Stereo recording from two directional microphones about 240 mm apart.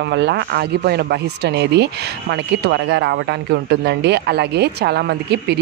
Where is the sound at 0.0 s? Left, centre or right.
Right.